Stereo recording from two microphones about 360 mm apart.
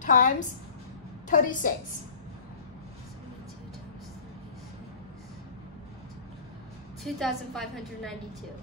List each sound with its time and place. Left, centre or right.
0.0 s a woman's voice: left
1.3 s a woman's voice: left
7.0 s a woman's voice: centre